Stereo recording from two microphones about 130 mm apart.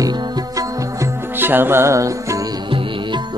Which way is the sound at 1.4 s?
15° right (ahead or behind).